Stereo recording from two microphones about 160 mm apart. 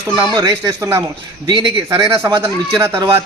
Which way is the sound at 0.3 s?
25° right (ahead or behind).